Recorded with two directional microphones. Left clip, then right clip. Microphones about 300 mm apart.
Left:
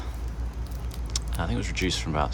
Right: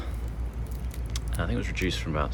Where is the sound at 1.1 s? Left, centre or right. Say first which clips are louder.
Left 1 dB; centre.